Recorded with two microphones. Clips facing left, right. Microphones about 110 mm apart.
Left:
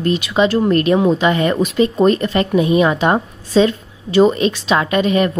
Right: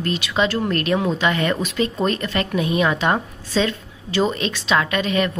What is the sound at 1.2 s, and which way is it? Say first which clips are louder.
A woman's voice: left 5 dB; 30° left (ahead or behind).